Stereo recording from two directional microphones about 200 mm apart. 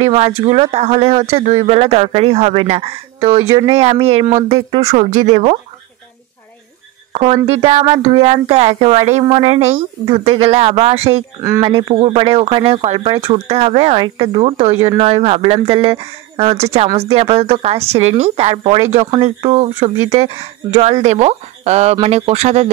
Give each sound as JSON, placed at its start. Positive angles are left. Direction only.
{"t": 0.4, "sound": "speech", "side_deg": -30}
{"t": 7.1, "sound": "speech", "side_deg": -30}